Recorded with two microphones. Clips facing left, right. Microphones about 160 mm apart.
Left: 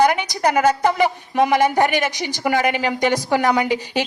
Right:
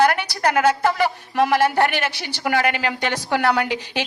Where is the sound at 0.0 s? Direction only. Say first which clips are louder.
Left 1 dB; 15° left (ahead or behind).